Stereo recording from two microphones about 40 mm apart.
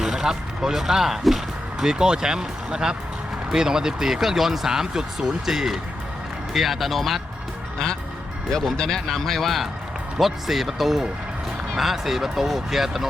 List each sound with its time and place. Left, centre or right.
0.0 s speech: centre
1.8 s speech: centre
8.4 s speech: centre